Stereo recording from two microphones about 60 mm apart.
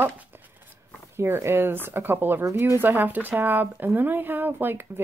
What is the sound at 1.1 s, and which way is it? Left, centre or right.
Speech, right.